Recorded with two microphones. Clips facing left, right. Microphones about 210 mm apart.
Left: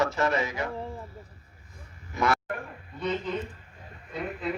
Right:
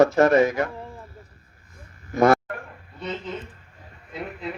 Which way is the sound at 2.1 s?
45° right (ahead or behind).